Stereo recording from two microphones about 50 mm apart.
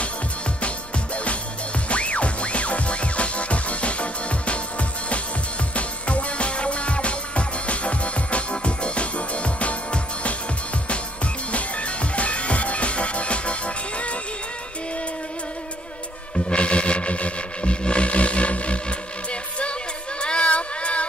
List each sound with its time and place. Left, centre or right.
0.6 s music: left
11.5 s music: left
16.4 s music: left
20.2 s a sound: left